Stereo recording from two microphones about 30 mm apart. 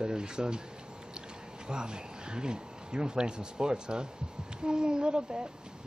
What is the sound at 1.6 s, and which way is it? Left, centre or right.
Speech, right.